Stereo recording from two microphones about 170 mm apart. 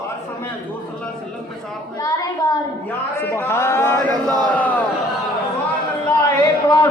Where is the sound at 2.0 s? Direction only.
20° left (ahead or behind).